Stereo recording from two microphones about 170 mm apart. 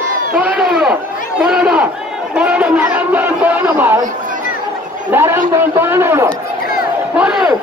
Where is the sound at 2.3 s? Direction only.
5° right (ahead or behind).